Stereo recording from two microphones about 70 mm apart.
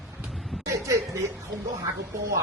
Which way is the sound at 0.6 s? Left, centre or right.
Right.